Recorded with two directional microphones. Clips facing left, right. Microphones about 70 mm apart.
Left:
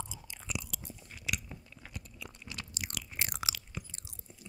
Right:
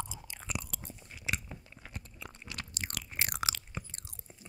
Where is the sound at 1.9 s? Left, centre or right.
Right.